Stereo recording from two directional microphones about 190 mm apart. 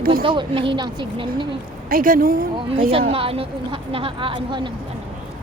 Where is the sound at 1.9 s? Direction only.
50° right (ahead or behind).